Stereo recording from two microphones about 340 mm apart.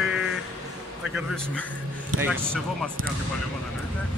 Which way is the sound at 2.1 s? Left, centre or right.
Centre.